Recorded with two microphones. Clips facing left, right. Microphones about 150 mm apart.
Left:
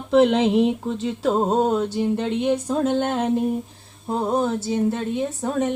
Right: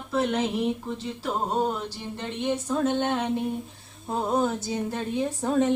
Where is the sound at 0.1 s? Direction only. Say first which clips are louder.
Left 9 dB; 90° left; by 2.2 s 65° left (ahead or behind).